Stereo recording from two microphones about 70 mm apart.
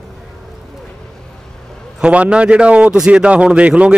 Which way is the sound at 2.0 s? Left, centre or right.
Centre.